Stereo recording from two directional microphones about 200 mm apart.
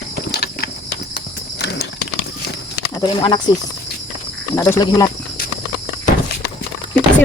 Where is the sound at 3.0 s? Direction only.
20° left (ahead or behind).